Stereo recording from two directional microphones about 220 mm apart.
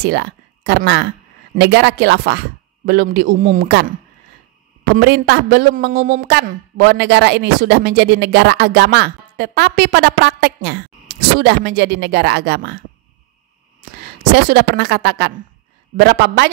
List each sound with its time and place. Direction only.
0.0 s speech: 50° right (ahead or behind)
4.9 s speech: 45° right (ahead or behind)
14.3 s speech: 50° right (ahead or behind)